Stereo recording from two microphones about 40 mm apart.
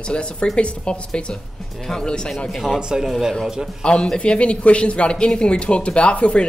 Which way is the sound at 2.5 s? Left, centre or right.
Centre.